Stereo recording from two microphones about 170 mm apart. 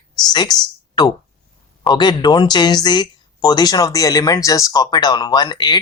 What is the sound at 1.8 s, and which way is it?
Speech, 25° left (ahead or behind).